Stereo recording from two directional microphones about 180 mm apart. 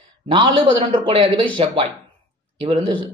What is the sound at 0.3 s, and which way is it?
Speech, 30° right (ahead or behind).